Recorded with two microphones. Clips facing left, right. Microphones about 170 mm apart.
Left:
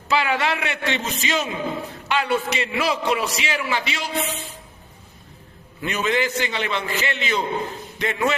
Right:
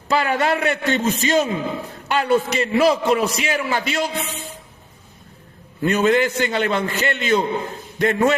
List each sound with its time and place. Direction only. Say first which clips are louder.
0.1 s a man's voice: right 3 dB; 45° right (ahead or behind)
5.8 s a man's voice: right 6 dB; 45° right (ahead or behind)